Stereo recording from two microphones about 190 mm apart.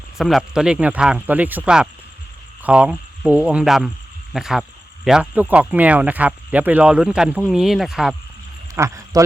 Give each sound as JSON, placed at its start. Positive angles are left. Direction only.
{"t": 0.2, "sound": "speech", "side_deg": 0}
{"t": 8.7, "sound": "speech", "side_deg": -15}